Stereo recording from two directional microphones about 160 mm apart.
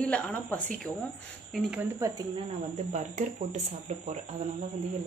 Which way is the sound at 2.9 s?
50° right (ahead or behind).